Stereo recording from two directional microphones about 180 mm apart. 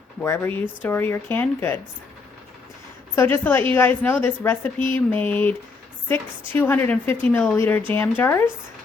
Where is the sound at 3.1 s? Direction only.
10° left (ahead or behind).